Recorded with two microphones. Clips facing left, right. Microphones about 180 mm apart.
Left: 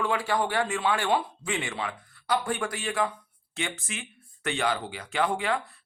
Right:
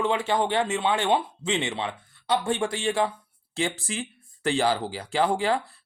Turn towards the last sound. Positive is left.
turn(degrees=-30)  # may be behind; listen again after turning